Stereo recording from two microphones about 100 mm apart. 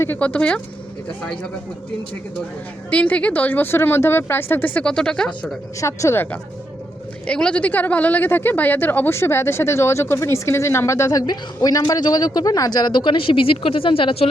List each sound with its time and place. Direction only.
0.0 s speech: 20° left (ahead or behind)
2.9 s speech: 15° left (ahead or behind)
5.8 s speech: 30° left (ahead or behind)
7.3 s speech: 10° left (ahead or behind); by 14.3 s 65° left (ahead or behind)